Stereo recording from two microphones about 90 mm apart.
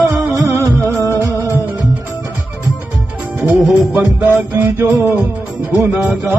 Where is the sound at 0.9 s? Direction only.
35° left (ahead or behind).